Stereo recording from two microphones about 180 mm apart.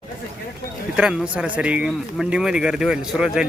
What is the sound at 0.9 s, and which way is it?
Speech, 5° right (ahead or behind).